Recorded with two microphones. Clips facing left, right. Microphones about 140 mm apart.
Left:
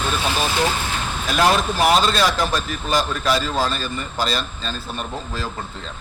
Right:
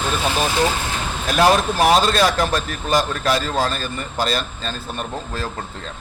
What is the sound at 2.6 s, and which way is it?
Speech, 45° right (ahead or behind).